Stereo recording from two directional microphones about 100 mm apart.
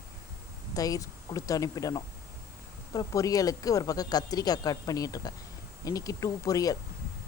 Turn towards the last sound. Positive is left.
turn(degrees=35)  # may be behind; listen again after turning